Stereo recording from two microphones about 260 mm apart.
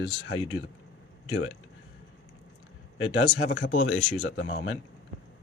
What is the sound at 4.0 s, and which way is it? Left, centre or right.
Speech, left.